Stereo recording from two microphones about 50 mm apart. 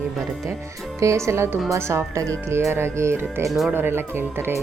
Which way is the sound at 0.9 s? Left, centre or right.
Right.